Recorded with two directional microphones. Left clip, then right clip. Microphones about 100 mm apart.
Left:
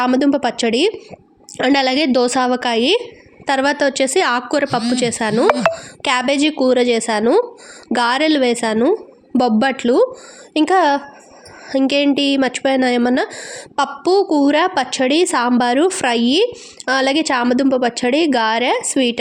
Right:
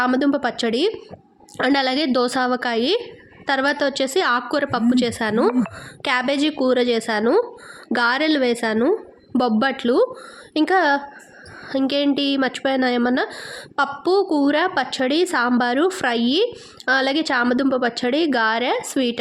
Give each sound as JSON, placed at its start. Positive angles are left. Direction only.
{"t": 0.0, "sound": "speech", "side_deg": 35}